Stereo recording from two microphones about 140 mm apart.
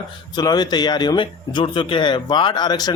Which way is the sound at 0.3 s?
30° left (ahead or behind).